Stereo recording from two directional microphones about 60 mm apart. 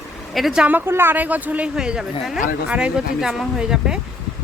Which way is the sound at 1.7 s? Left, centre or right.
Centre.